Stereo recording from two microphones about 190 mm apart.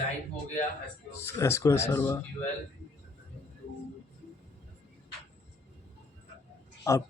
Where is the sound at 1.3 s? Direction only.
15° left (ahead or behind).